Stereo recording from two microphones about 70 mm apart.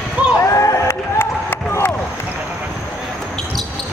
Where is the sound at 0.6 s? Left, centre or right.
Left.